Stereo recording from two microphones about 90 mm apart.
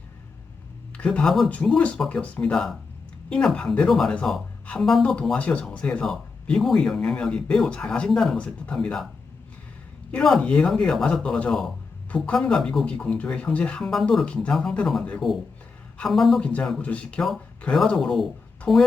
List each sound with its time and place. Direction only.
0.9 s speech: 10° left (ahead or behind)
10.1 s speech: 5° left (ahead or behind)
16.4 s speech: 15° left (ahead or behind)